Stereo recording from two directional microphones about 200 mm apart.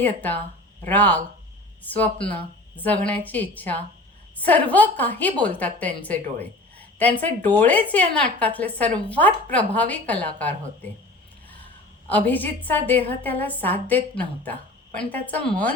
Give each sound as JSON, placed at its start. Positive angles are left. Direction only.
{"t": 0.0, "sound": "a woman's voice", "side_deg": 10}
{"t": 12.0, "sound": "a woman's voice", "side_deg": 10}